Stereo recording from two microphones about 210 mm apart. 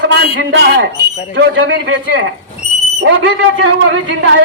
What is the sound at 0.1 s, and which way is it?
A man's voice, 55° right (ahead or behind).